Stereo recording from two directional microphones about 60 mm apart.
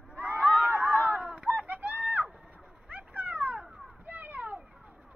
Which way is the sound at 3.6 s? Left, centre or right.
Centre.